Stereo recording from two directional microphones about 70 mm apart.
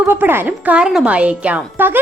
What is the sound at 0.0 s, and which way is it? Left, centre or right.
A woman's voice, right.